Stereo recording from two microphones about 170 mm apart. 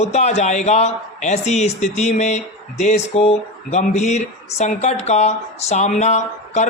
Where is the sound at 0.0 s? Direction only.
40° left (ahead or behind).